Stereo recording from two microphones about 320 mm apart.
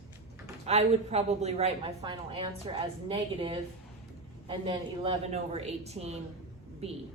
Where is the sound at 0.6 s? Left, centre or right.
Centre.